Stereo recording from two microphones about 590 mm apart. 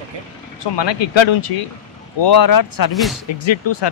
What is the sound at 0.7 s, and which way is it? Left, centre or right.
Speech, left.